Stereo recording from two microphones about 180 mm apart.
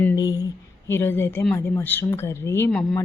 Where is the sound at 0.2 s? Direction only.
20° left (ahead or behind).